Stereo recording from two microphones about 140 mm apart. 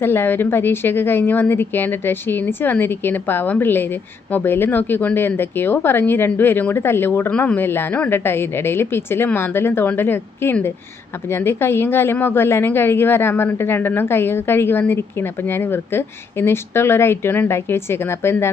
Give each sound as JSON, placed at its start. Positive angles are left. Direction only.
{"t": 0.0, "sound": "a woman's voice", "side_deg": 15}